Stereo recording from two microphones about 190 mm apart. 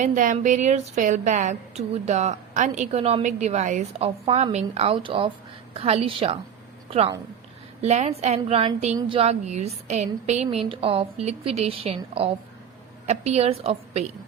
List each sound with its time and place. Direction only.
0.0 s a woman's voice: 40° right (ahead or behind)
7.8 s a woman's voice: 35° right (ahead or behind)